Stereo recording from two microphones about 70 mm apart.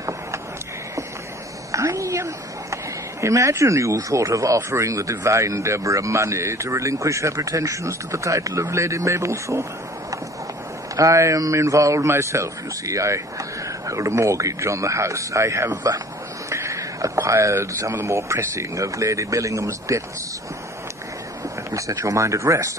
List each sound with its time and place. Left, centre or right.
1.7 s speech: right
11.0 s speech: right
16.4 s a sound: right
17.3 s speech: right
21.6 s speech: right